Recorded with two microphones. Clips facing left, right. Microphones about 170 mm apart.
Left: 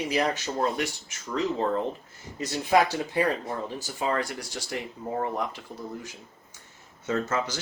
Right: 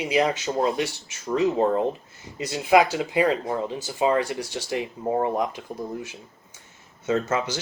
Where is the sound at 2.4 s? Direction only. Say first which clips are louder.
Right 4 dB; 10° right (ahead or behind).